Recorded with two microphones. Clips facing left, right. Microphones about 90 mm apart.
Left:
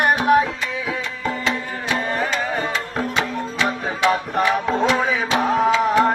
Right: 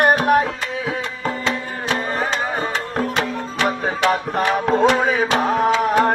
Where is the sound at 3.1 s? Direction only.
55° right (ahead or behind).